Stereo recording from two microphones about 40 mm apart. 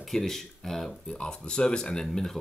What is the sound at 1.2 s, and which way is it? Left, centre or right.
Speech, left.